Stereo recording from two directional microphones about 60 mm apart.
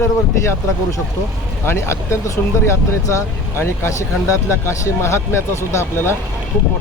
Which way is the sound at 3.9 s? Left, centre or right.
Left.